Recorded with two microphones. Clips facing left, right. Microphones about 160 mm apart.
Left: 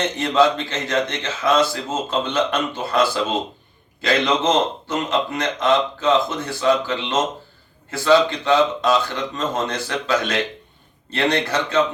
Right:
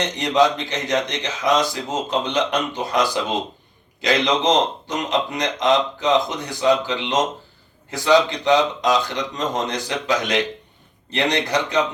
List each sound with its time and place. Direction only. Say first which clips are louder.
0.0 s speech: left 1 dB; 15° right (ahead or behind)